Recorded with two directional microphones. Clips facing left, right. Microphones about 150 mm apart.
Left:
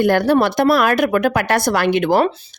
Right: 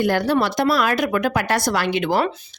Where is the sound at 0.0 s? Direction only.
55° left (ahead or behind).